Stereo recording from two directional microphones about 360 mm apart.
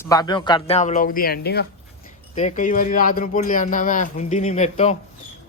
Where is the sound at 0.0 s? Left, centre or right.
Centre.